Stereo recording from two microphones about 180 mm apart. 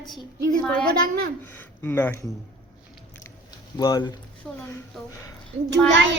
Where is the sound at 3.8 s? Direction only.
20° left (ahead or behind).